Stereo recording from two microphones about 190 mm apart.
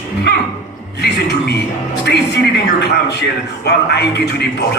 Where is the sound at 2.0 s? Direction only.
60° left (ahead or behind).